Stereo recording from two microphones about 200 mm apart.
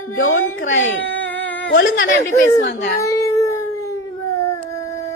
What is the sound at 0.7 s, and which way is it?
A child's voice, 70° left (ahead or behind).